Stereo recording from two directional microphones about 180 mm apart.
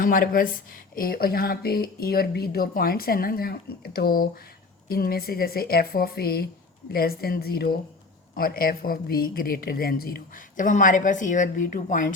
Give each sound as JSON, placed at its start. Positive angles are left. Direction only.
{"t": 0.0, "sound": "a woman's voice", "side_deg": 50}